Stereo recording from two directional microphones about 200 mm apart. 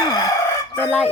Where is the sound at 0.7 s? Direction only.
5° left (ahead or behind).